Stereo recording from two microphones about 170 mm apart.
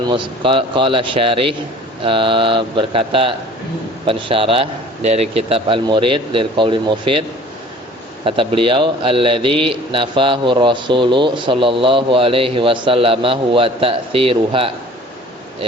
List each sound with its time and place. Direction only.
0.0 s speech: 30° right (ahead or behind)
8.2 s speech: 30° right (ahead or behind)